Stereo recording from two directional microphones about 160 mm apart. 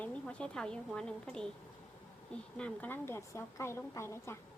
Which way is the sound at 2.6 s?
10° left (ahead or behind).